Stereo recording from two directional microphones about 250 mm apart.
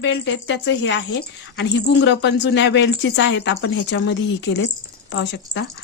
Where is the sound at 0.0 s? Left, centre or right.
Left.